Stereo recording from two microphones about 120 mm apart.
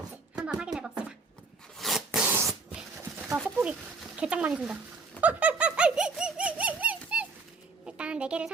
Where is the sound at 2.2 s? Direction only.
20° right (ahead or behind).